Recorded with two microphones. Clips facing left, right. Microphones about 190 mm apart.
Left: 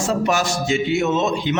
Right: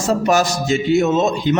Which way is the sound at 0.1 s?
40° right (ahead or behind).